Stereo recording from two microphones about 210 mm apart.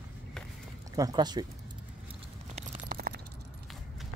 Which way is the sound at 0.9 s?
20° right (ahead or behind).